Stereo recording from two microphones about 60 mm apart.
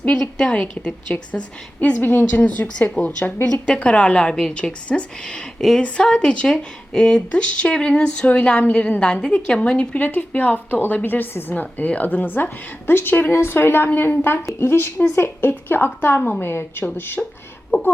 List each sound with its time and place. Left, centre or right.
0.2 s speech: centre
10.0 s a woman's voice: left
17.7 s speech: left